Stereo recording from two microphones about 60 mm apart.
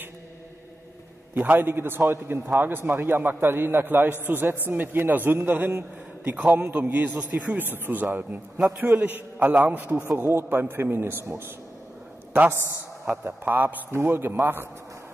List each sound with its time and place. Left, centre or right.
1.3 s a man's voice: right
9.5 s a man's voice: right
10.1 s a man's voice: right
13.2 s a man's voice: right
13.9 s a man's voice: right